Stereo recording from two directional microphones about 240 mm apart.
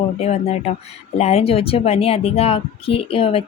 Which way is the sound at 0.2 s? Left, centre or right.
Left.